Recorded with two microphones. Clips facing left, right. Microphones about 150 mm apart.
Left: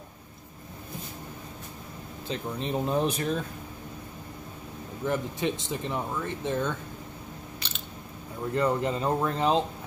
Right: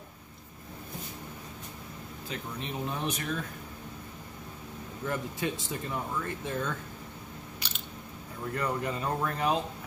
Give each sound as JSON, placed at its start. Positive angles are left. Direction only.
{"t": 2.2, "sound": "speech", "side_deg": 30}
{"t": 5.0, "sound": "speech", "side_deg": 20}
{"t": 7.6, "sound": "biting", "side_deg": -10}
{"t": 8.5, "sound": "speech", "side_deg": 25}